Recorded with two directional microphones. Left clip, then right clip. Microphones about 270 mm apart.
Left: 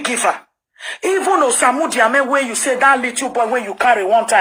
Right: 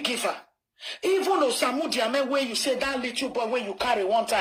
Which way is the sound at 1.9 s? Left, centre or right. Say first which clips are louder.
Left 11 dB; left.